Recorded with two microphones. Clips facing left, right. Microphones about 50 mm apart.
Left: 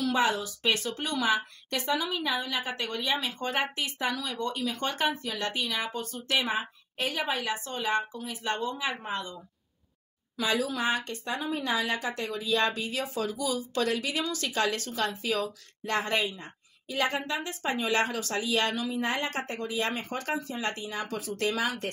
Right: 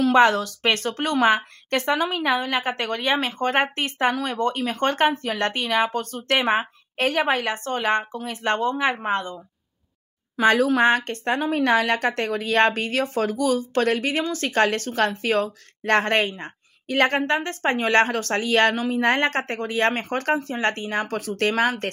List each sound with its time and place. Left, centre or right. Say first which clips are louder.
0.1 s a woman's voice: right 10 dB; right
10.3 s a woman's voice: right 11 dB; right